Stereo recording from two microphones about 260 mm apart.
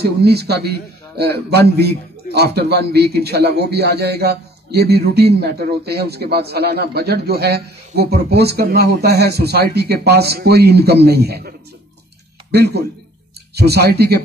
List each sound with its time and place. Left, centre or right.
0.0 s a man's voice: right